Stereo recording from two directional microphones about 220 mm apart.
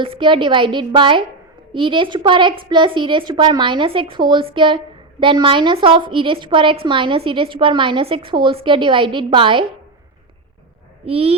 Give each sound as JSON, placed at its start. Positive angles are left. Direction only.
{"t": 0.0, "sound": "a woman's voice", "side_deg": -20}
{"t": 11.0, "sound": "a woman's voice", "side_deg": -25}